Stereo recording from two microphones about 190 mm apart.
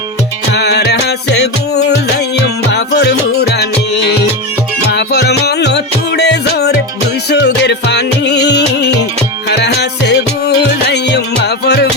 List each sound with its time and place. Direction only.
0.5 s music: 60° left (ahead or behind)
4.9 s music: 60° left (ahead or behind)
10.1 s music: 60° left (ahead or behind)